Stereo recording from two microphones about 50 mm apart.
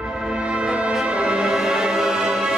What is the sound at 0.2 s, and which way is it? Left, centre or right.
Music, centre.